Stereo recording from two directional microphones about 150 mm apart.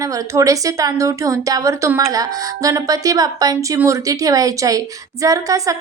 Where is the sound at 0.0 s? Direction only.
20° right (ahead or behind).